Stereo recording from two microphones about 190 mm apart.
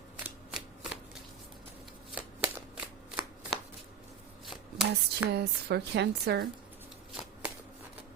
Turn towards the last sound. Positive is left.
turn(degrees=-60)  # may be behind; listen again after turning